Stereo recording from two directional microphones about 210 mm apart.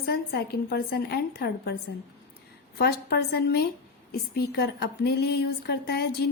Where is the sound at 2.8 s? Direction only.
50° left (ahead or behind).